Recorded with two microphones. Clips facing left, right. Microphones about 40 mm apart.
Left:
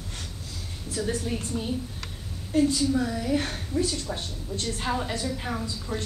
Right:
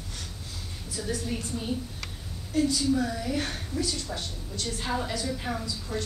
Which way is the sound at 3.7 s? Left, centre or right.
Left.